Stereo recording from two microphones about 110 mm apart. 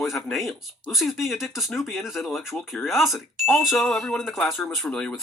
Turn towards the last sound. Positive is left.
turn(degrees=10)  # may be behind; listen again after turning